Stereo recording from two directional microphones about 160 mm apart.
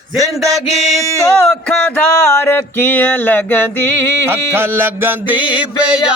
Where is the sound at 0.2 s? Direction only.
20° right (ahead or behind).